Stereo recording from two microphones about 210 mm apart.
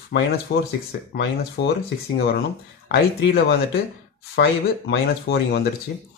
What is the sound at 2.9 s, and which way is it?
Speech, 50° left (ahead or behind).